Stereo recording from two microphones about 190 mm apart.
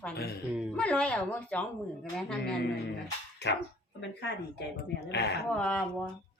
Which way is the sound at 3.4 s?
60° left (ahead or behind).